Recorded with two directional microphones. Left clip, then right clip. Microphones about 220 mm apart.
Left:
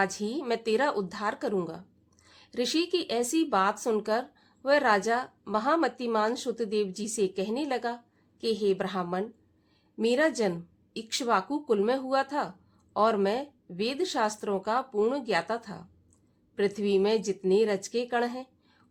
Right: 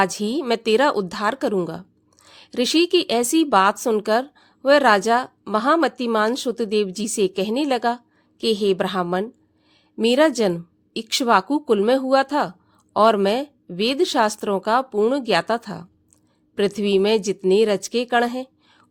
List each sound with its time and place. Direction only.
0.0 s speech: 35° right (ahead or behind)